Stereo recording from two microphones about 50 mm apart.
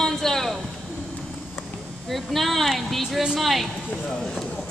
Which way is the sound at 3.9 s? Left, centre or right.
Left.